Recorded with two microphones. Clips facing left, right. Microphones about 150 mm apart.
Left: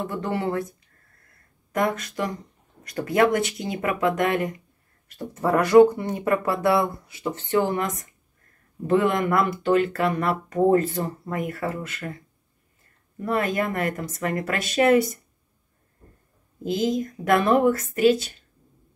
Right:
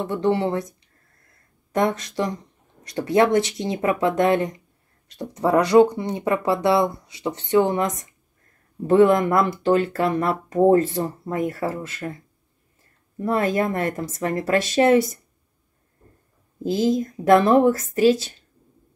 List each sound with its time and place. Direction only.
0.0 s speech: 25° right (ahead or behind)
1.7 s speech: 25° right (ahead or behind)
5.0 s speech: 15° right (ahead or behind)
8.8 s speech: 35° right (ahead or behind)
13.2 s speech: 30° right (ahead or behind)
16.6 s speech: 35° right (ahead or behind)